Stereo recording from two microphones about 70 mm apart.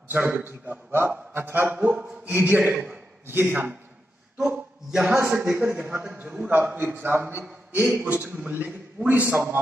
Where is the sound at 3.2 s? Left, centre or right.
Right.